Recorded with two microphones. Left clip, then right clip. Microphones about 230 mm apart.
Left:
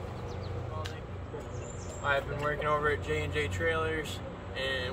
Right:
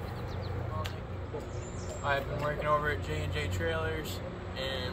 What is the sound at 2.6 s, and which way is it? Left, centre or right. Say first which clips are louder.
Speech: left 1 dB; centre.